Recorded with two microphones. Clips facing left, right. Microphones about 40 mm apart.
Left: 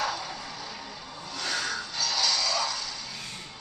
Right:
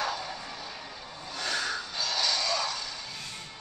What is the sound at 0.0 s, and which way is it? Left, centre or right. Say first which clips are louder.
Vehicle: left 1 dB; centre.